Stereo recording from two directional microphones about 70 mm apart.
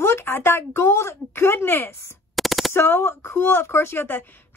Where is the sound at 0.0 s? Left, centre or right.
Left.